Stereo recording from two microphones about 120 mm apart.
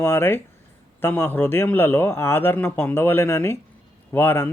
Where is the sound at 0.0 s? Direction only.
20° left (ahead or behind).